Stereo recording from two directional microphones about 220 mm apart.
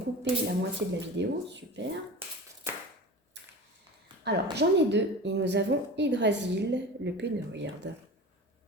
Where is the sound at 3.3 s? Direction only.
50° right (ahead or behind).